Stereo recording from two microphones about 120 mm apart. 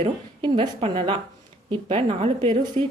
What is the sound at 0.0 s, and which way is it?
Speech, 45° right (ahead or behind).